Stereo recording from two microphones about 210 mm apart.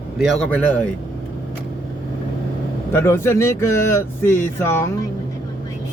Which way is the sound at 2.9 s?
10° left (ahead or behind).